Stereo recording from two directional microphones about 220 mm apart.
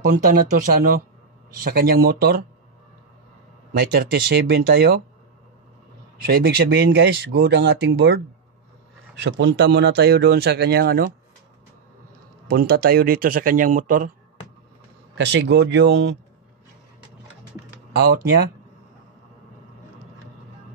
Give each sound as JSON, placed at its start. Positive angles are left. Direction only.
{"t": 0.0, "sound": "speech", "side_deg": -40}
{"t": 3.7, "sound": "speech", "side_deg": -45}
{"t": 6.2, "sound": "speech", "side_deg": -45}
{"t": 9.2, "sound": "speech", "side_deg": -50}
{"t": 12.4, "sound": "speech", "side_deg": -45}
{"t": 15.1, "sound": "speech", "side_deg": -50}